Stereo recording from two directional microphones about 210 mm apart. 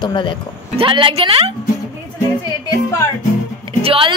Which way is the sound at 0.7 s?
25° right (ahead or behind).